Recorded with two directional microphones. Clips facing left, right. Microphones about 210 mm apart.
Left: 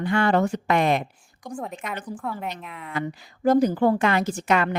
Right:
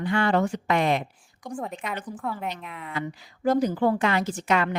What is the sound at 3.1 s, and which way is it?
A woman's voice, 50° left (ahead or behind).